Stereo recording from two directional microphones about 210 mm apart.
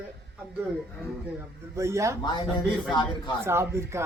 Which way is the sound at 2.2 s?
20° left (ahead or behind).